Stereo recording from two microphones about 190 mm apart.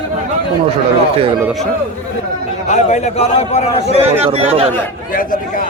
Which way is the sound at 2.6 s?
40° left (ahead or behind).